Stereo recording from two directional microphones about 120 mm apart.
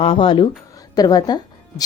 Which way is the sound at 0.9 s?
35° left (ahead or behind).